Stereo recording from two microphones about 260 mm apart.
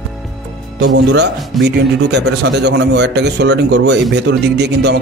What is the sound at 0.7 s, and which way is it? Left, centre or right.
Speech, right.